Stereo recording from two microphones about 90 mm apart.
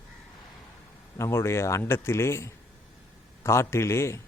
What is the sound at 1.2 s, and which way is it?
Speech, 30° left (ahead or behind).